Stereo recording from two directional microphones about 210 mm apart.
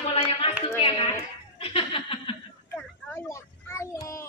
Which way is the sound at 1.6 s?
25° left (ahead or behind).